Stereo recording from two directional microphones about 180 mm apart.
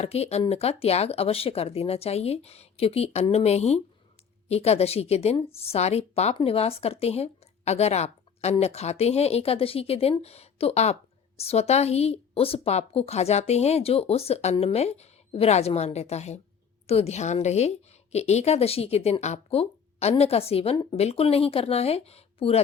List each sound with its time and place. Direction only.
0.0 s a woman's voice: 35° left (ahead or behind)